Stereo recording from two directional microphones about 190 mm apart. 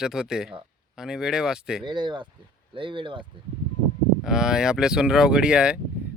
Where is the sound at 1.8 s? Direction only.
25° right (ahead or behind).